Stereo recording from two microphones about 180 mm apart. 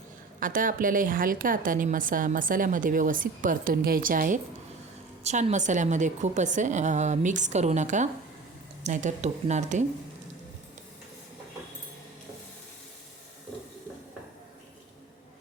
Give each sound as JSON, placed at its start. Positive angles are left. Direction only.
{"t": 0.3, "sound": "a woman's voice", "side_deg": -50}